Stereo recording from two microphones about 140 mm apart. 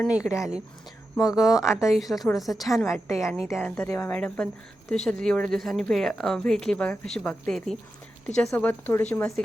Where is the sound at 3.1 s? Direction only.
20° left (ahead or behind).